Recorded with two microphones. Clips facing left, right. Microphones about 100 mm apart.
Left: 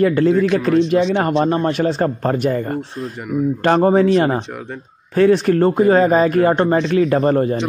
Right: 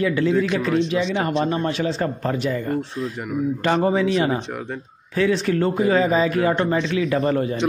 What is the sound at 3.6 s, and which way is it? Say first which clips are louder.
Speech: left 6 dB; 45° left (ahead or behind).